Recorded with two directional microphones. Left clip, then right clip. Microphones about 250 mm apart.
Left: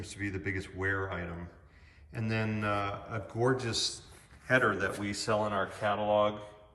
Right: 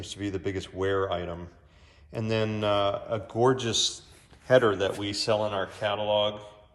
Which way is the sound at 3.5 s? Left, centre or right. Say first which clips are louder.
Right 6 dB; centre.